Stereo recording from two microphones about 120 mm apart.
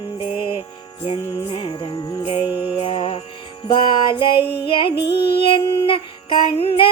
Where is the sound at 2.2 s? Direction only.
50° left (ahead or behind).